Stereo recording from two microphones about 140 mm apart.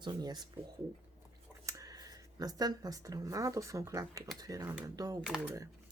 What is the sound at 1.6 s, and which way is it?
Speech, 25° right (ahead or behind).